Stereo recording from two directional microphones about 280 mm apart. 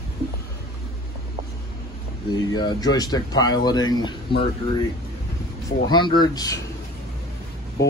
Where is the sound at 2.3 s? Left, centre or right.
Centre.